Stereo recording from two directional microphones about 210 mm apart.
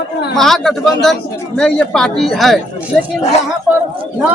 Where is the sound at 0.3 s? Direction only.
Centre (ahead or behind).